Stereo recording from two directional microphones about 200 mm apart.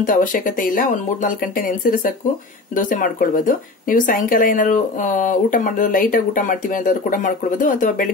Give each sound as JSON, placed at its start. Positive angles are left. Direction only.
{"t": 0.0, "sound": "speech", "side_deg": 40}
{"t": 2.7, "sound": "speech", "side_deg": 40}